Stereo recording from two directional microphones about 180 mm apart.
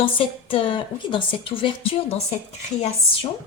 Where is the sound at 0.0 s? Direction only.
30° left (ahead or behind).